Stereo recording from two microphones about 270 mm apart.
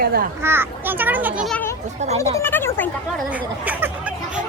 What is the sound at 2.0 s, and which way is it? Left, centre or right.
Speech, right.